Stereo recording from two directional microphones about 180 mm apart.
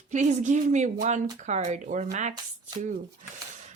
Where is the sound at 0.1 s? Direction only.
40° right (ahead or behind).